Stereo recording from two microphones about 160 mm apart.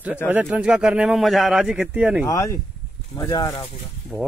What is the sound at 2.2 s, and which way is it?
Speech, 20° left (ahead or behind).